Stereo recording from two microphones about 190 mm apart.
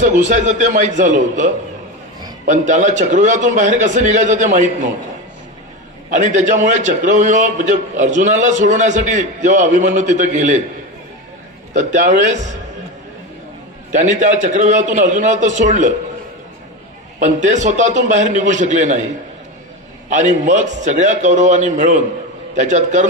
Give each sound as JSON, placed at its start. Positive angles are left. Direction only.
{"t": 0.0, "sound": "a man's voice", "side_deg": -40}
{"t": 6.0, "sound": "a man's voice", "side_deg": -40}
{"t": 11.7, "sound": "a man's voice", "side_deg": -40}
{"t": 13.9, "sound": "a man's voice", "side_deg": -40}
{"t": 17.2, "sound": "a man's voice", "side_deg": -40}
{"t": 20.1, "sound": "a man's voice", "side_deg": -40}